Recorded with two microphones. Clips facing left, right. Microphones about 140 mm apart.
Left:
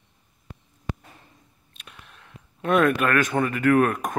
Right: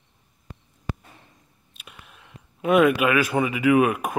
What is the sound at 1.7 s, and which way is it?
Speech, 5° right (ahead or behind).